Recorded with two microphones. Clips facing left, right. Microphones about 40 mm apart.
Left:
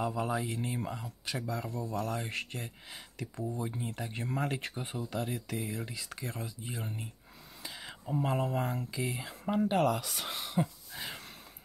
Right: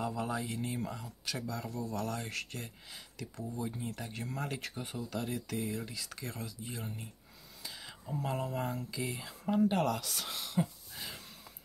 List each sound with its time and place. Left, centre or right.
0.0 s speech: centre
0.7 s speech: left
2.0 s speech: centre
3.3 s speech: left
7.6 s a sound: centre
8.9 s speech: centre